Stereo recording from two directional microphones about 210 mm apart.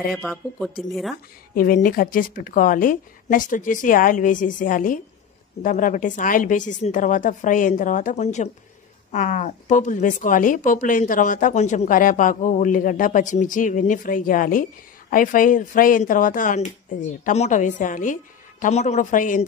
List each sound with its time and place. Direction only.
0.1 s speech: centre (ahead or behind)
1.5 s speech: 40° left (ahead or behind)